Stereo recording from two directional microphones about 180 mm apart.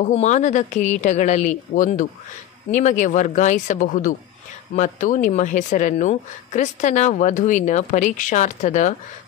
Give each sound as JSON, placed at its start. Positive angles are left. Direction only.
{"t": 0.1, "sound": "a woman's voice", "side_deg": 40}